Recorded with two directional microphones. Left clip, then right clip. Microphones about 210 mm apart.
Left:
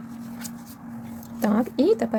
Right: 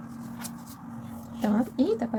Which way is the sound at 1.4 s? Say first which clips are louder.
Left 4 dB; 50° left (ahead or behind).